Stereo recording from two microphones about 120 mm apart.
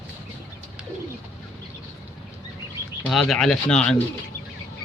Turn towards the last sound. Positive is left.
turn(degrees=5)  # may be behind; listen again after turning